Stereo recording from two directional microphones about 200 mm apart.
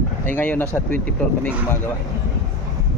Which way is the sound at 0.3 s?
10° left (ahead or behind).